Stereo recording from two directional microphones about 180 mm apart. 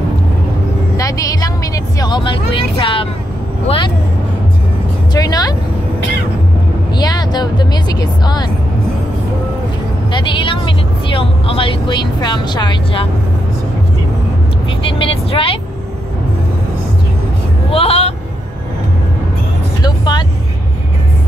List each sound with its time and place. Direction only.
0.9 s a sound: 20° left (ahead or behind)
2.0 s speech: 25° left (ahead or behind)
5.1 s speech: 20° left (ahead or behind)
7.0 s speech: 25° left (ahead or behind)
10.1 s speech: 25° left (ahead or behind)
14.9 s speech: 30° left (ahead or behind)
17.6 s speech: 30° left (ahead or behind)
19.8 s vehicle: 25° left (ahead or behind)